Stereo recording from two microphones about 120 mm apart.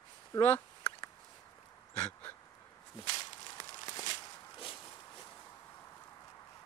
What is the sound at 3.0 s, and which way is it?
Walk, 40° left (ahead or behind).